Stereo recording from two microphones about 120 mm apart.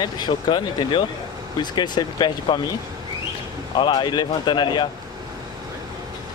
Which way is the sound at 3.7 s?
40° left (ahead or behind).